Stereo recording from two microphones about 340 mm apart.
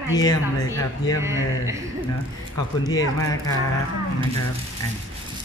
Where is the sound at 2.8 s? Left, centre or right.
Centre.